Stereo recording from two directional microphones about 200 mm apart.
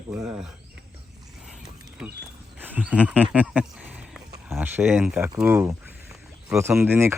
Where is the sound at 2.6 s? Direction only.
10° right (ahead or behind).